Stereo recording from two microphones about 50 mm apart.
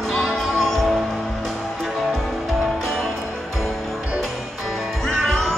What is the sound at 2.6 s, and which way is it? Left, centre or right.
Music, centre.